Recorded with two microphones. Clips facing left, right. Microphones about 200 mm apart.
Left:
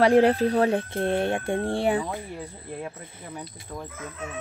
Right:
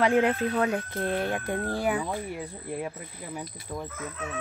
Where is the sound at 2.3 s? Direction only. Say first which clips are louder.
Right 2 dB; 10° right (ahead or behind).